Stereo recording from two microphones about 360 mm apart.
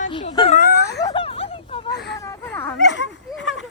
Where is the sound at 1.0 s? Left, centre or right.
Centre.